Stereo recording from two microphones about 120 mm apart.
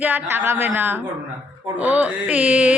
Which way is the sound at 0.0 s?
20° right (ahead or behind).